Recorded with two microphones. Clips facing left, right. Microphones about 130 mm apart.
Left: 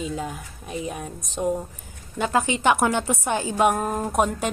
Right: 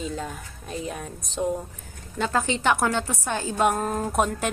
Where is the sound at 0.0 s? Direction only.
5° left (ahead or behind).